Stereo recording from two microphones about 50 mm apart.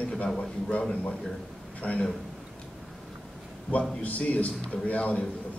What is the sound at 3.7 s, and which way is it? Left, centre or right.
A man's voice, left.